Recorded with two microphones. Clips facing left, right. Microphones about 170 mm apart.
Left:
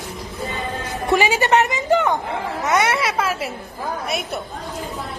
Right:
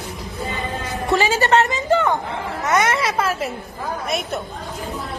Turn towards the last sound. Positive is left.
turn(degrees=5)  # may be behind; listen again after turning